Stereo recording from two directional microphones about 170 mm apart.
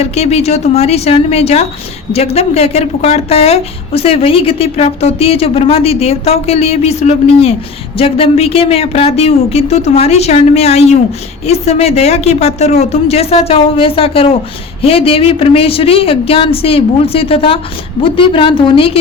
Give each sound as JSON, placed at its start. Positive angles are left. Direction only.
{"t": 0.0, "sound": "speech", "side_deg": 40}